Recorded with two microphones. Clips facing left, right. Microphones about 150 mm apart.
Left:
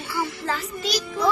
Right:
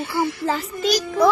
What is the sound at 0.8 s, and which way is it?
Speech, 45° right (ahead or behind).